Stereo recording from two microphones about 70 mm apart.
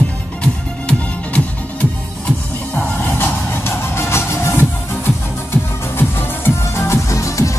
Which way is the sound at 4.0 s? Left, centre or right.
Left.